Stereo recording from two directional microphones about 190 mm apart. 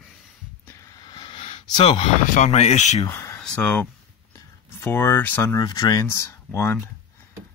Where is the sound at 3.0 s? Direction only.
15° left (ahead or behind).